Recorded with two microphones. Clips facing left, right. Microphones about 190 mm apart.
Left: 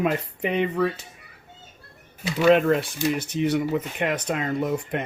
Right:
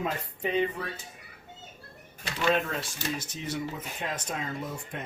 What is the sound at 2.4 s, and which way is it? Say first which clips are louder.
Speech: left 10 dB; 60° left (ahead or behind).